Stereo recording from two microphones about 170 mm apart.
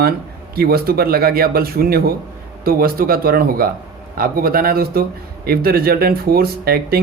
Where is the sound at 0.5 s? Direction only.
65° right (ahead or behind).